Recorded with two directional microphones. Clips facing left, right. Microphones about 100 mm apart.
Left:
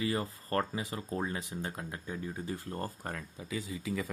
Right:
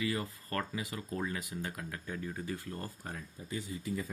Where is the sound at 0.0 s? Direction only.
30° left (ahead or behind).